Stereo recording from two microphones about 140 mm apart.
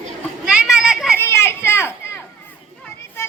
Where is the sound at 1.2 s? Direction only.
20° left (ahead or behind).